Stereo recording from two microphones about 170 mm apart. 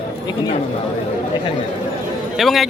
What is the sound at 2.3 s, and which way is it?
Speech, centre (ahead or behind).